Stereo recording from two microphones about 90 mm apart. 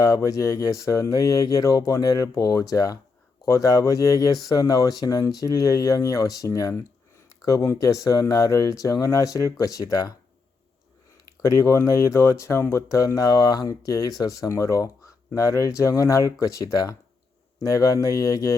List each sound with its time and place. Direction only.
0.0 s speech: 40° left (ahead or behind)
11.4 s speech: 35° left (ahead or behind)